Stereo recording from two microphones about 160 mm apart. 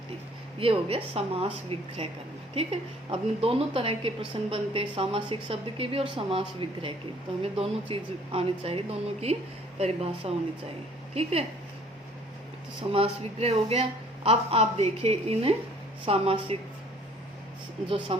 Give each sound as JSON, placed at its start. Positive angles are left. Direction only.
{"t": 0.6, "sound": "a woman's voice", "side_deg": -35}
{"t": 3.1, "sound": "a woman's voice", "side_deg": -35}
{"t": 12.9, "sound": "a woman's voice", "side_deg": -35}
{"t": 17.8, "sound": "a woman's voice", "side_deg": -35}